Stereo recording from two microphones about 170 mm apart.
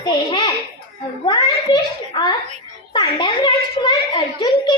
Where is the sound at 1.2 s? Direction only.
25° left (ahead or behind).